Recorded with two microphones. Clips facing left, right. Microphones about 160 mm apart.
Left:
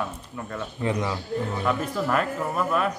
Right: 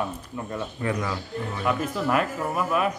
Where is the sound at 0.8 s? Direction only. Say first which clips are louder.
Left 2 dB; 20° left (ahead or behind).